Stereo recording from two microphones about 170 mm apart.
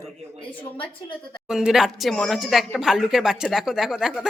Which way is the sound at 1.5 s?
5° right (ahead or behind).